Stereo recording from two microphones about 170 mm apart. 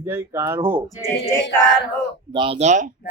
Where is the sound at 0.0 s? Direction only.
15° right (ahead or behind).